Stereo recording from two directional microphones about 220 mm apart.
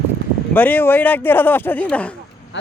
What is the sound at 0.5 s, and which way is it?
A man's voice, 10° left (ahead or behind).